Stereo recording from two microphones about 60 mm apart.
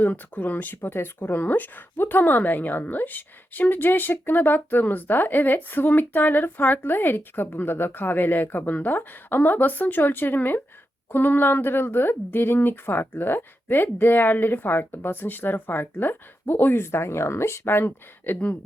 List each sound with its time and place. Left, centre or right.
0.0 s speech: left